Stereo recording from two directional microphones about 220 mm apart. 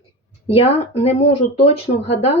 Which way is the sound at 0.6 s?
30° left (ahead or behind).